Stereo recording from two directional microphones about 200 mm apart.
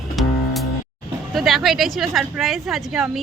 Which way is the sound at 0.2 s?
Centre (ahead or behind).